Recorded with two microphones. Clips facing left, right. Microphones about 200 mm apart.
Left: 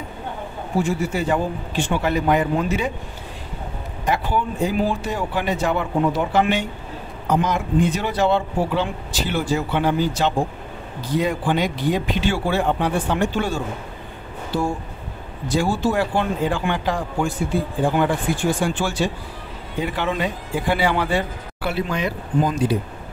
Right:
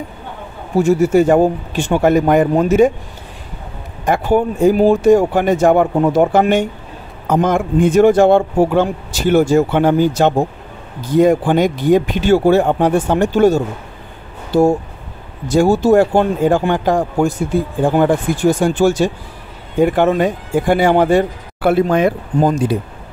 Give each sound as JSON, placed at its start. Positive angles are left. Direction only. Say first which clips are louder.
{"t": 0.7, "sound": "speech", "louder": "right 11 dB", "side_deg": -45}
{"t": 4.0, "sound": "speech", "louder": "right 8 dB", "side_deg": -50}